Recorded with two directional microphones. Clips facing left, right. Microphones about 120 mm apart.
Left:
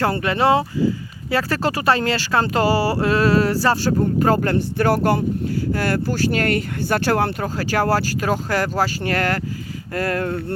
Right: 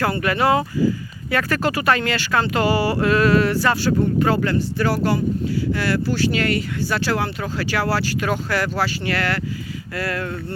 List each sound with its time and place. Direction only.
0.0 s speech: 30° left (ahead or behind); by 10.3 s 45° left (ahead or behind)